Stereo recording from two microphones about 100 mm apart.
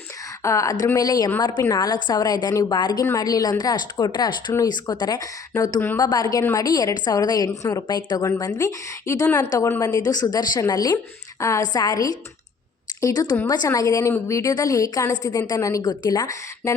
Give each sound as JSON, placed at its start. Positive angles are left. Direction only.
{"t": 0.4, "sound": "a woman's voice", "side_deg": 30}
{"t": 7.9, "sound": "speech", "side_deg": 45}
{"t": 8.5, "sound": "a woman's voice", "side_deg": 30}
{"t": 9.2, "sound": "a woman's voice", "side_deg": 20}
{"t": 9.5, "sound": "a woman's voice", "side_deg": 35}